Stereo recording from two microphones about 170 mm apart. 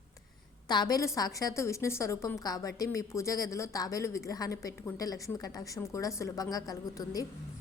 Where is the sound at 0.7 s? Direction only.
25° left (ahead or behind).